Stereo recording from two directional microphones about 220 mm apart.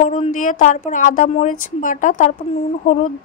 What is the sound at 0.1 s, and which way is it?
A woman's voice, 35° left (ahead or behind).